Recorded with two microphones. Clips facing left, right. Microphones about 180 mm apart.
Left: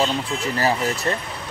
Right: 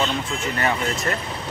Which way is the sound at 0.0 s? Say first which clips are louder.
Left 2 dB; 30° left (ahead or behind).